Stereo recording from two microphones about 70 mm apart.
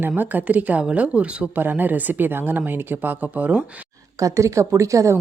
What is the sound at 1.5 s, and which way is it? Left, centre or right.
Speech, right.